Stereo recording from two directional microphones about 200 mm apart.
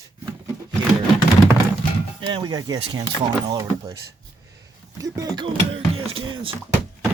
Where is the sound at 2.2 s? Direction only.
25° right (ahead or behind).